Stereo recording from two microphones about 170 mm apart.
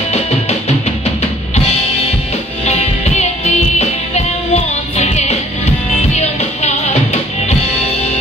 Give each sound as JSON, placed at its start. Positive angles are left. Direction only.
{"t": 2.6, "sound": "music", "side_deg": 40}